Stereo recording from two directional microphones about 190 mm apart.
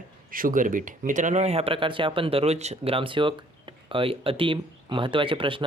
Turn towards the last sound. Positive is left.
turn(degrees=-25)  # may be behind; listen again after turning